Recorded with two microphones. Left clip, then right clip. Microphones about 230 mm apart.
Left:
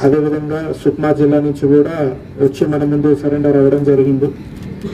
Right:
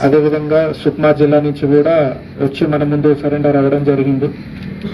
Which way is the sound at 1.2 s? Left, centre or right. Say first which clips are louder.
Right 1 dB; left.